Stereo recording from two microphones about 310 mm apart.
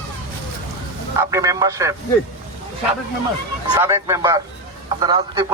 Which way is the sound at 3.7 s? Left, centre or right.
Centre.